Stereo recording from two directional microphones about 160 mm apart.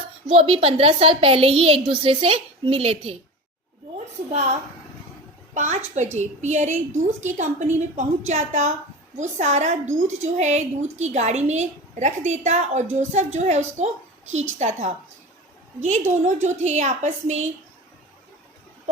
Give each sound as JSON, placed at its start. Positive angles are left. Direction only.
{"t": 0.3, "sound": "a woman's voice", "side_deg": -35}
{"t": 4.3, "sound": "a woman's voice", "side_deg": -45}
{"t": 5.5, "sound": "a woman's voice", "side_deg": -50}
{"t": 16.2, "sound": "a woman's voice", "side_deg": -50}